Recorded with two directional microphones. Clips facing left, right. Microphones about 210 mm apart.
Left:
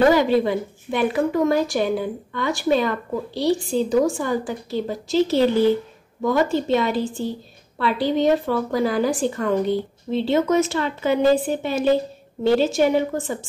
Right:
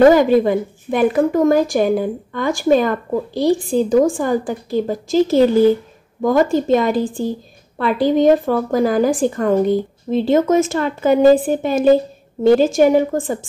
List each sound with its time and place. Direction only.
0.1 s a woman's voice: 50° right (ahead or behind)